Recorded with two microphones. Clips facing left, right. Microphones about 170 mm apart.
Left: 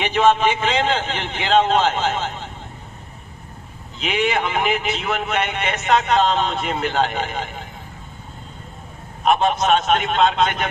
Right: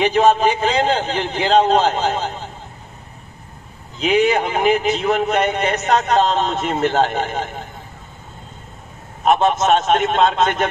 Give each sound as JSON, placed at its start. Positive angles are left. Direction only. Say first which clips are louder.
{"t": 0.0, "sound": "a man's voice", "louder": "right 3 dB", "side_deg": -40}
{"t": 4.0, "sound": "a man's voice", "louder": "right 5 dB", "side_deg": -40}
{"t": 9.2, "sound": "a man's voice", "louder": "right 2 dB", "side_deg": -45}